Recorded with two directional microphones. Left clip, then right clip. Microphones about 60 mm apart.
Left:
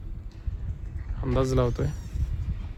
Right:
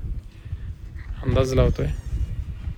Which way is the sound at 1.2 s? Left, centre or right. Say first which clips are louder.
Right 4 dB; left.